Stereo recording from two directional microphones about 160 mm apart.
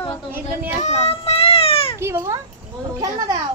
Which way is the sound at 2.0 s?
15° right (ahead or behind).